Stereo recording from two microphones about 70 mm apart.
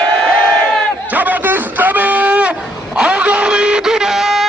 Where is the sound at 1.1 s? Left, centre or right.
Right.